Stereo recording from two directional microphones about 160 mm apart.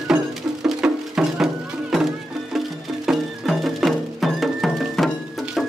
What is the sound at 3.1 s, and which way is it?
Music, centre (ahead or behind).